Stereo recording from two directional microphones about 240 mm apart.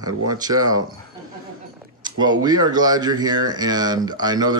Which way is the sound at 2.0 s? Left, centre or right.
Centre.